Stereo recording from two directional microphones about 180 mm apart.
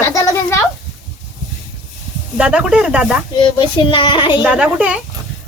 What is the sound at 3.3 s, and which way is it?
A child's voice, 25° left (ahead or behind).